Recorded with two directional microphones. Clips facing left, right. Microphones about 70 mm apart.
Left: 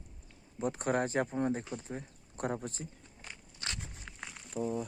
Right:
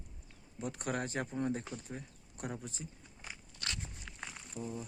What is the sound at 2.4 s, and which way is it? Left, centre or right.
Speech, left.